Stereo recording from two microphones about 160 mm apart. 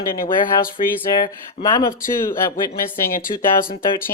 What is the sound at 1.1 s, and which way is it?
Speech, 25° left (ahead or behind).